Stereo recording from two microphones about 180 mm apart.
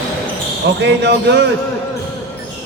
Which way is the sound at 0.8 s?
70° right (ahead or behind).